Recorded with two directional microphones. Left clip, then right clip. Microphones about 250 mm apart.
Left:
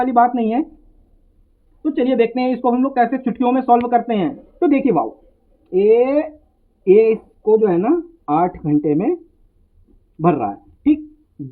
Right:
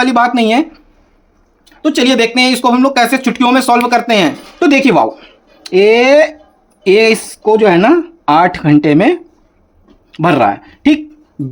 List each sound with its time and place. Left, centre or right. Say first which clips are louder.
0.0 s speech: right 4 dB; right
1.8 s speech: right 6 dB; right
4.6 s speech: right 7 dB; right
10.2 s speech: right 8 dB; right